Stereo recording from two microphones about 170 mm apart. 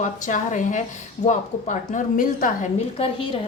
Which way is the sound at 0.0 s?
45° left (ahead or behind).